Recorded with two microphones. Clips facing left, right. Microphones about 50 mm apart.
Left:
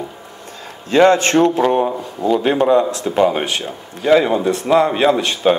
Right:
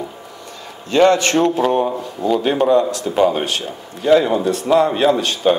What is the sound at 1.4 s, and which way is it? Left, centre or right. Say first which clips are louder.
Speech: left 2 dB; centre.